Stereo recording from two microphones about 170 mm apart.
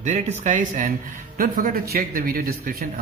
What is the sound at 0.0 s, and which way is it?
Speech, 45° right (ahead or behind).